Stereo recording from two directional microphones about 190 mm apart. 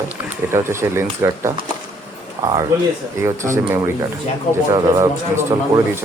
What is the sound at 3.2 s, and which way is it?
Speech, 15° right (ahead or behind).